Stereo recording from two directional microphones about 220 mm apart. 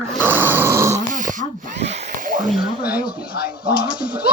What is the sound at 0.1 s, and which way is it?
Dog, 10° right (ahead or behind).